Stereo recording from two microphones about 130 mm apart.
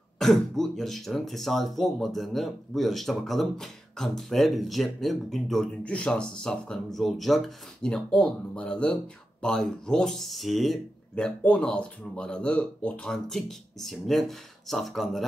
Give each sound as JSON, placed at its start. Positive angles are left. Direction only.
{"t": 0.2, "sound": "speech", "side_deg": 0}